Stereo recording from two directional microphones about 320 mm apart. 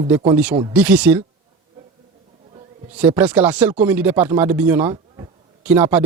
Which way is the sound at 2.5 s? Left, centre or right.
Centre.